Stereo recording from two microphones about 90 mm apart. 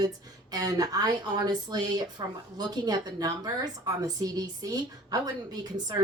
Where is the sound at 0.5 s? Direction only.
45° right (ahead or behind).